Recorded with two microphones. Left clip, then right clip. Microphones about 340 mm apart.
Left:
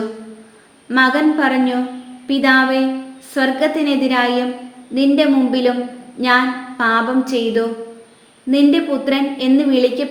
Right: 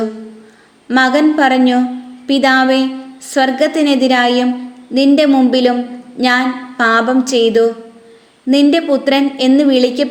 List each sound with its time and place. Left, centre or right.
0.9 s speech: right